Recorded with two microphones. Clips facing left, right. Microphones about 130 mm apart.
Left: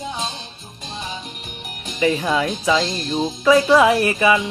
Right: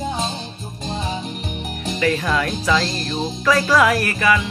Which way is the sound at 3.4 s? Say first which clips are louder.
Left 3 dB; 25° left (ahead or behind).